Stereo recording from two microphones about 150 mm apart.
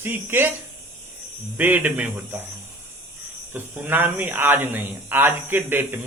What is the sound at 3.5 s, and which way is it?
Speech, 15° right (ahead or behind).